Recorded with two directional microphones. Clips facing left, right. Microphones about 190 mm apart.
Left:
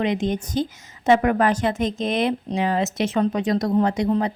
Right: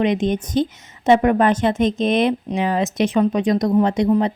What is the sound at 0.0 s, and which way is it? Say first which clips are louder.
Speech: right 4 dB; 20° right (ahead or behind).